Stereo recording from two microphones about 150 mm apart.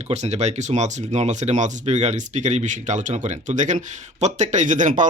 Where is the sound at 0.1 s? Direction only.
50° right (ahead or behind).